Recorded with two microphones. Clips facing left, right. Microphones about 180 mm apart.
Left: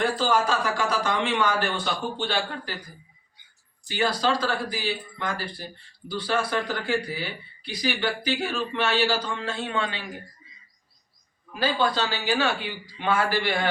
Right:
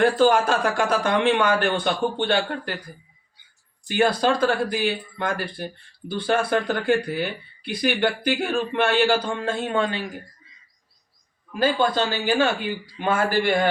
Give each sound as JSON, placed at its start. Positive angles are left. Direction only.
{"t": 0.0, "sound": "speech", "side_deg": -55}
{"t": 3.8, "sound": "speech", "side_deg": -55}
{"t": 11.5, "sound": "speech", "side_deg": -50}